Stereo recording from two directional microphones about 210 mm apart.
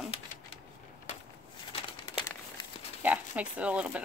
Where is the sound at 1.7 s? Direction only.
25° left (ahead or behind).